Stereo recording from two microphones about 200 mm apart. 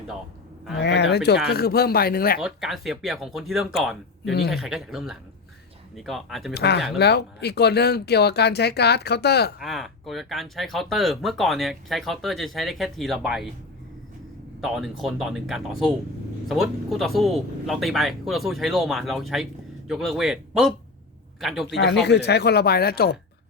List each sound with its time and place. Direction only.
0.8 s speech: 60° left (ahead or behind)
2.4 s speech: centre (ahead or behind)
4.3 s speech: 55° left (ahead or behind)
4.5 s speech: centre (ahead or behind)
6.5 s speech: 55° left (ahead or behind)
9.6 s speech: centre (ahead or behind)
14.6 s speech: centre (ahead or behind)
22.0 s speech: 55° left (ahead or behind)